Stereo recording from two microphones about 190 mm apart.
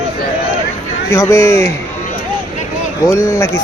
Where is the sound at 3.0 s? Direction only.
15° left (ahead or behind).